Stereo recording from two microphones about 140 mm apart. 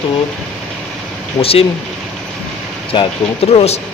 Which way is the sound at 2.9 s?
35° left (ahead or behind).